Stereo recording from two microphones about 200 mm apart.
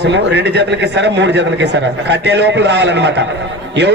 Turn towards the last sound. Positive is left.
turn(degrees=-60)  # may be behind; listen again after turning